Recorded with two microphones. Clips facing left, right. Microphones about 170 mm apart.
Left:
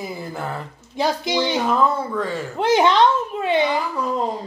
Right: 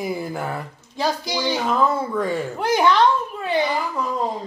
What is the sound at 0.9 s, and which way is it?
Speech, 20° left (ahead or behind).